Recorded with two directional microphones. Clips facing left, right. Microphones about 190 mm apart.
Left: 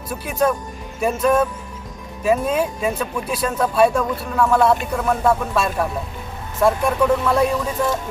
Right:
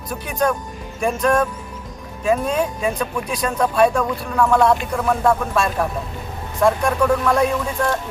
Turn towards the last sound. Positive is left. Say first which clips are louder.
# even
turn(degrees=5)  # may be behind; listen again after turning